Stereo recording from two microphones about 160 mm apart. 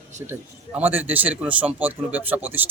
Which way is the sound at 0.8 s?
10° right (ahead or behind).